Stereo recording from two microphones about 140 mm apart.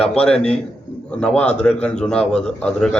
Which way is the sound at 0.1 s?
5° left (ahead or behind).